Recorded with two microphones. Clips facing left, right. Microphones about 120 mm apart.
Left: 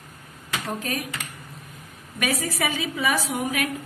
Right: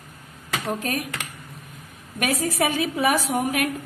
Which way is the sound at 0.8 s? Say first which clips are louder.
Right 2 dB; 55° right (ahead or behind).